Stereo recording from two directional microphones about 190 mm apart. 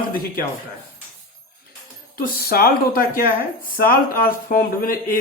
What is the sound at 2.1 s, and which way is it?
Speech, 50° left (ahead or behind).